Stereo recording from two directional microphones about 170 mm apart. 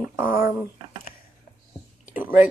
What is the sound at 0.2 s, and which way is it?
Speech, 55° left (ahead or behind).